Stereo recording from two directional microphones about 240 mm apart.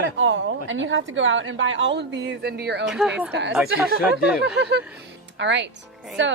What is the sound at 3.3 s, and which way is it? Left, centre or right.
Speech, right.